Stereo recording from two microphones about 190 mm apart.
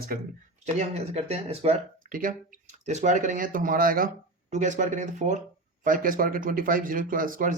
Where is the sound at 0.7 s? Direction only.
35° right (ahead or behind).